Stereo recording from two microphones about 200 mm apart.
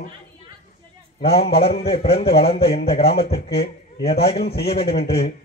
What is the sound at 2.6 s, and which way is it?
A man's voice, 50° left (ahead or behind).